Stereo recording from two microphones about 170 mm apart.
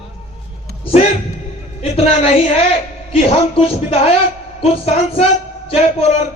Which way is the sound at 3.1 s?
35° left (ahead or behind).